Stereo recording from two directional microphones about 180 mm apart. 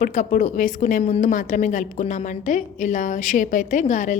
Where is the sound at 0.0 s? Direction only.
45° left (ahead or behind).